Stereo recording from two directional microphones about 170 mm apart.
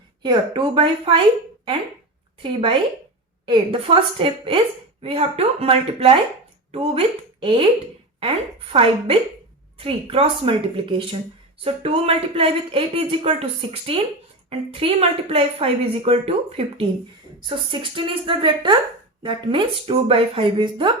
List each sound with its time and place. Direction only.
0.2 s speech: 30° right (ahead or behind)
2.4 s a woman's voice: 30° right (ahead or behind)
11.6 s a woman's voice: 35° right (ahead or behind)